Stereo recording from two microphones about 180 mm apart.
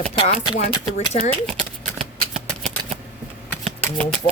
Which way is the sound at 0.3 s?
40° left (ahead or behind).